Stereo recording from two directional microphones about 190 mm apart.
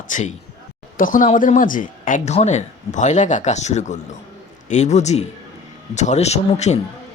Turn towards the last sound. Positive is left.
turn(degrees=35)  # may be behind; listen again after turning